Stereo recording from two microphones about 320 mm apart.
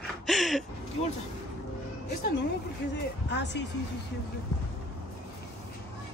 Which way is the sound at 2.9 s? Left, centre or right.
Left.